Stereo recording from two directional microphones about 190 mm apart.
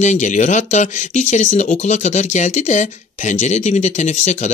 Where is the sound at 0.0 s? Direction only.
40° left (ahead or behind).